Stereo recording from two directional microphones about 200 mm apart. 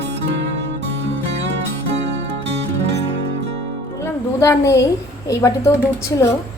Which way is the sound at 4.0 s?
15° left (ahead or behind).